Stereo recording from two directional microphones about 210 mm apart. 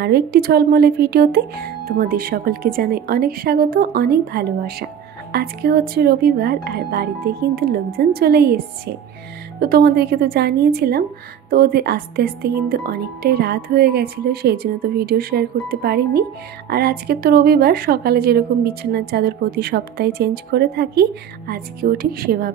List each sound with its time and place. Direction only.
0.0 s speech: 50° right (ahead or behind)